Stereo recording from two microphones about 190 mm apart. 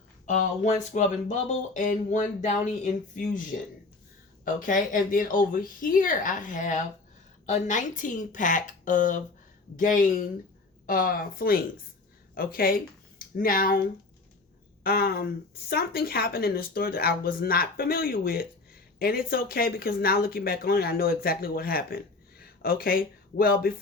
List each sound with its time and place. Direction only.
0.3 s speech: 40° left (ahead or behind)
4.4 s speech: 45° left (ahead or behind)
14.8 s speech: 55° left (ahead or behind)